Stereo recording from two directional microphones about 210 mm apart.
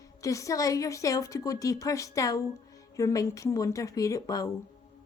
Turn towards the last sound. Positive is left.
turn(degrees=15)  # may be behind; listen again after turning